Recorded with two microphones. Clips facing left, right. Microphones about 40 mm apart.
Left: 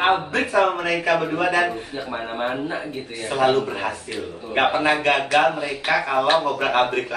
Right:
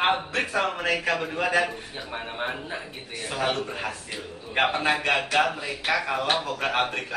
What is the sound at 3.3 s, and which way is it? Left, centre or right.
Speech, centre.